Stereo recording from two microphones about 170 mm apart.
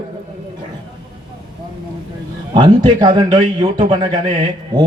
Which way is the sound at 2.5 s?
25° right (ahead or behind).